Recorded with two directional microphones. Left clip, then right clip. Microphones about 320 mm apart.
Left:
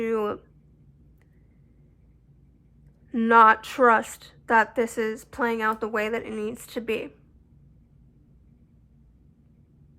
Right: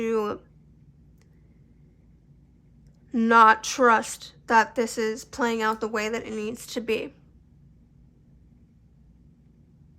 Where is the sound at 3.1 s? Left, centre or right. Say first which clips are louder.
Even; centre.